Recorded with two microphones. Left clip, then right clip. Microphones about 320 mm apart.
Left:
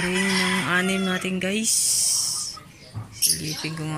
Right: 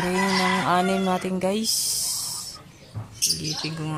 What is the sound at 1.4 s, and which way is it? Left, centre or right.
Owl, centre.